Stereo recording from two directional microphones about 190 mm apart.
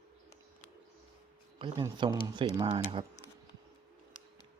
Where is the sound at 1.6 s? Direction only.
25° right (ahead or behind).